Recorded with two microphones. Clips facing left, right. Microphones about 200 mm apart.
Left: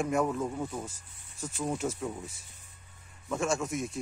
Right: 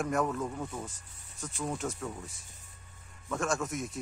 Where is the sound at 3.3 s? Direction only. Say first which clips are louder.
Left 2 dB; centre (ahead or behind).